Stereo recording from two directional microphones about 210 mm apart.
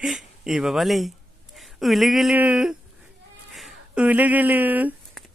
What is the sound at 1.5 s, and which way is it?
Speech, centre (ahead or behind).